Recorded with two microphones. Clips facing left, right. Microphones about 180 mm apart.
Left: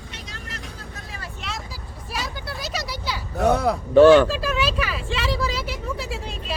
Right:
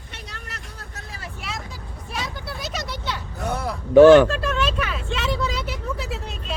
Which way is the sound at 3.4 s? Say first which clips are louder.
Left 9 dB; 70° left (ahead or behind).